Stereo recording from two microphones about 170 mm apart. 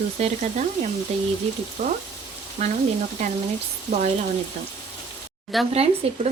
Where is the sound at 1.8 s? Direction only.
45° right (ahead or behind).